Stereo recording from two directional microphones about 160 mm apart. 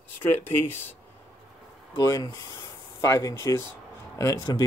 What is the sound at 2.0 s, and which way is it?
Speech, 25° left (ahead or behind).